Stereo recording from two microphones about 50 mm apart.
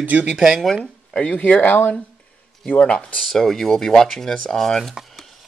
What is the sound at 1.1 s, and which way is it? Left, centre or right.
Speech, left.